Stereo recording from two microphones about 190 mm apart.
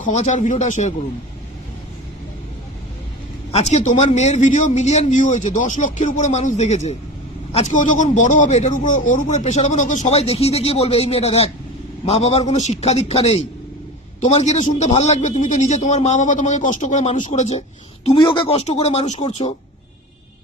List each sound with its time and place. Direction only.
0.0 s a man's voice: 35° left (ahead or behind)
3.5 s a man's voice: 35° left (ahead or behind)
18.0 s a man's voice: 25° left (ahead or behind)